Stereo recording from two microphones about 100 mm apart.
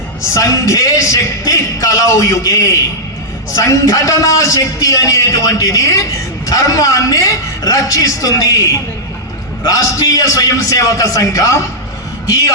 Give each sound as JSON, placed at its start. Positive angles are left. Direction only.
{"t": 0.3, "sound": "a man's voice", "side_deg": 30}
{"t": 9.6, "sound": "a man's voice", "side_deg": 35}